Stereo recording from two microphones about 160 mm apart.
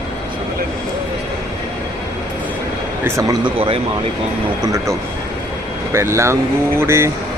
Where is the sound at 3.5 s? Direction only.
35° right (ahead or behind).